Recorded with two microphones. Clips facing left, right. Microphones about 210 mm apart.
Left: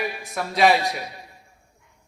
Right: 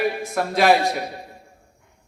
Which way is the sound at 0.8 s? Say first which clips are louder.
Right 5 dB; 55° right (ahead or behind).